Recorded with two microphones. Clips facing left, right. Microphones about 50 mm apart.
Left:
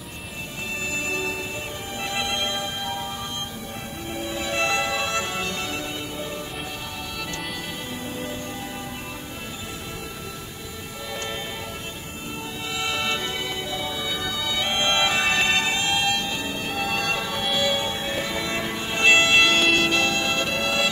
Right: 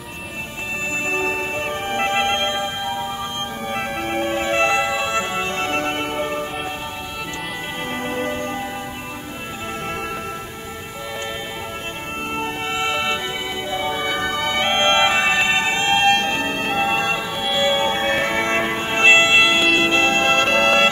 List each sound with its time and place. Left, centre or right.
1.0 s music: right
3.7 s music: right
8.0 s music: right
12.7 s music: right
13.7 s music: right; by 17.6 s centre
17.6 s music: right; by 19.8 s centre
19.8 s music: right